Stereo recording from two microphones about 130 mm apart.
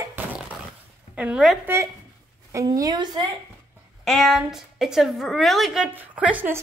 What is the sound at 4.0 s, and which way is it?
A woman's voice, centre (ahead or behind).